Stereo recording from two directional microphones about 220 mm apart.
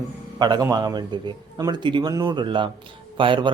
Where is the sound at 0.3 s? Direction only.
20° right (ahead or behind).